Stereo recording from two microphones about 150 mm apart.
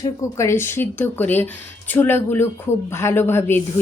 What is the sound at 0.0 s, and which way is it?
Speech, 20° left (ahead or behind).